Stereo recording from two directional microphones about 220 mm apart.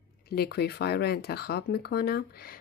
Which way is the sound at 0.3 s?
45° left (ahead or behind).